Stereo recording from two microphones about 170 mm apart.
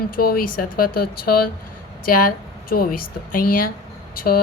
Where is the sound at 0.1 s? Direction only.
60° left (ahead or behind).